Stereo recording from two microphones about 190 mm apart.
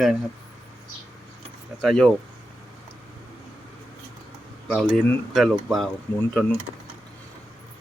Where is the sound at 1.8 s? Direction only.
5° left (ahead or behind).